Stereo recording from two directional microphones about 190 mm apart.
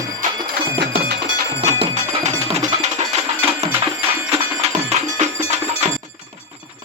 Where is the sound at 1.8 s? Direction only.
35° right (ahead or behind).